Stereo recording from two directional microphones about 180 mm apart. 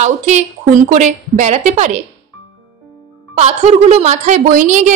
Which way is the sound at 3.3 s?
35° right (ahead or behind).